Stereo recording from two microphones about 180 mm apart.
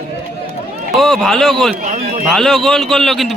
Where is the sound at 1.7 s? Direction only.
45° right (ahead or behind).